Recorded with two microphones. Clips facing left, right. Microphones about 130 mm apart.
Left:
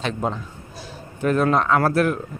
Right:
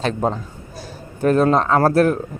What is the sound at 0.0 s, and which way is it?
A man's voice, 40° right (ahead or behind).